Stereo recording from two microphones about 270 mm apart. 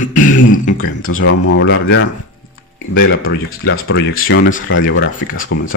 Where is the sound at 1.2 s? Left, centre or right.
Left.